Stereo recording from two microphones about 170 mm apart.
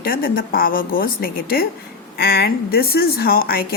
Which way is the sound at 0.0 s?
60° left (ahead or behind).